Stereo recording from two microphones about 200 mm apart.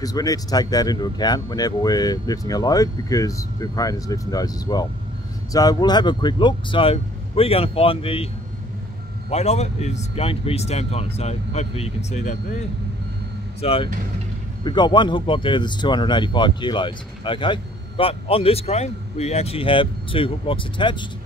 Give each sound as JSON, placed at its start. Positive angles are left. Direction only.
{"t": 0.0, "sound": "a man's voice", "side_deg": 15}
{"t": 9.3, "sound": "speech", "side_deg": 35}
{"t": 13.6, "sound": "a man's voice", "side_deg": 30}